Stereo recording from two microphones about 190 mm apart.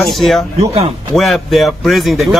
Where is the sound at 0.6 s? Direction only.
30° right (ahead or behind).